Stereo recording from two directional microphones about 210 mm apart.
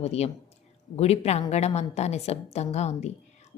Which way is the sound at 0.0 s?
30° left (ahead or behind).